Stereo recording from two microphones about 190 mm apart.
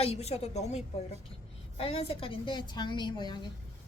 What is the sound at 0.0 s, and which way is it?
A woman's voice, 35° left (ahead or behind).